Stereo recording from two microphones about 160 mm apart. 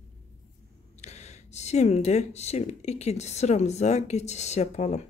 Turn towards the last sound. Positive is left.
turn(degrees=45)  # may be behind; listen again after turning